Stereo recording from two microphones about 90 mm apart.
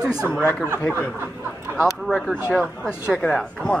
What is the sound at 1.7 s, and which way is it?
Speech, 5° left (ahead or behind).